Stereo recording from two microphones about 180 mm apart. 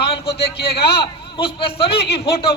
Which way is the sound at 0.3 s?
65° left (ahead or behind).